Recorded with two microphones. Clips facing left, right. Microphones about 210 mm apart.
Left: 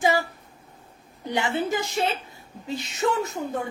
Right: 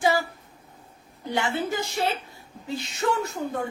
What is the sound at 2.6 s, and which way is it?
Speech, 20° left (ahead or behind).